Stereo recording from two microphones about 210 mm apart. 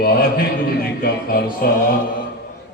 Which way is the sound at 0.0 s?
45° left (ahead or behind).